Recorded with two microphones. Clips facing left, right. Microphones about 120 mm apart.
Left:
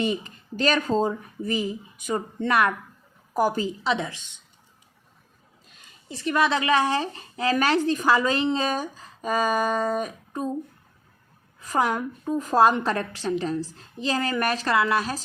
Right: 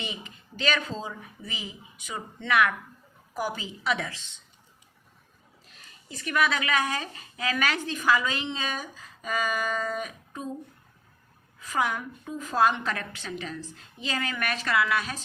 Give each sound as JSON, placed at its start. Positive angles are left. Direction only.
{"t": 0.0, "sound": "speech", "side_deg": 40}
{"t": 3.8, "sound": "a woman's voice", "side_deg": 25}
{"t": 6.1, "sound": "a woman's voice", "side_deg": 30}
{"t": 11.7, "sound": "a woman's voice", "side_deg": 40}